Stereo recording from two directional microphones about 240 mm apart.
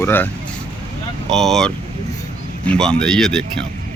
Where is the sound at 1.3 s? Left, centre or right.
Centre.